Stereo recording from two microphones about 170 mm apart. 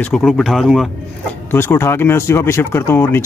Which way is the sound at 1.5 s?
15° left (ahead or behind).